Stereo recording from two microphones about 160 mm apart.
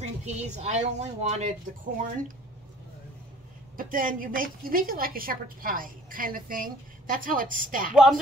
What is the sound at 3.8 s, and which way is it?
A woman's voice, 60° right (ahead or behind).